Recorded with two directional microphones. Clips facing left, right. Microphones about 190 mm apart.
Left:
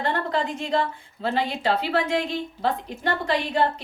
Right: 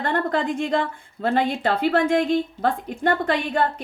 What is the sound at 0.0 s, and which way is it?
A woman's voice, 50° right (ahead or behind).